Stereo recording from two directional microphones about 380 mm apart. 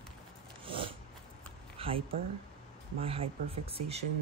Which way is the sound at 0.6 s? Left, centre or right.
Centre.